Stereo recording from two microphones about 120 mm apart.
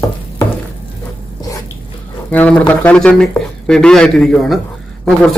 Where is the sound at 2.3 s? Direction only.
10° left (ahead or behind).